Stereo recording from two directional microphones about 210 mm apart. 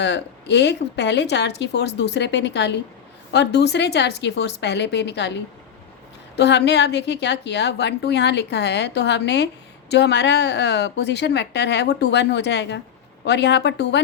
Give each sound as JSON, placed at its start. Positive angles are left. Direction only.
{"t": 0.0, "sound": "a woman's voice", "side_deg": 55}